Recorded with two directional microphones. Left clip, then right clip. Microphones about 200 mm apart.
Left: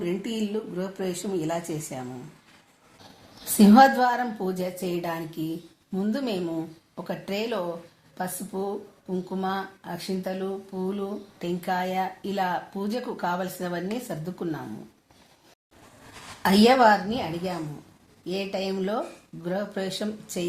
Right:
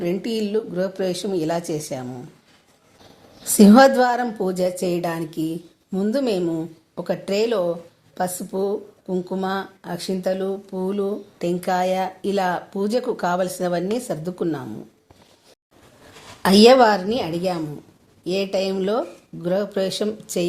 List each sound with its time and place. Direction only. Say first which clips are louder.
0.0 s speech: right 6 dB; 40° right (ahead or behind)
3.6 s speech: right 4 dB; 45° right (ahead or behind)
16.4 s speech: right 6 dB; 50° right (ahead or behind)